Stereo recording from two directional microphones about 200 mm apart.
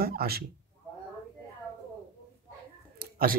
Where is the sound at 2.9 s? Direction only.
45° right (ahead or behind).